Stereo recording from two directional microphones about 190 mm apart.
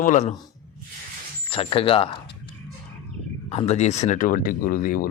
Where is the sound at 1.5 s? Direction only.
30° left (ahead or behind).